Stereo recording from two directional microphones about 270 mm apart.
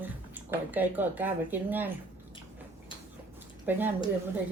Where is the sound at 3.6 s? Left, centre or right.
Centre.